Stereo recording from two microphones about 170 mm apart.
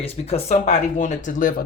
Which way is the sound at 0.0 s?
35° left (ahead or behind).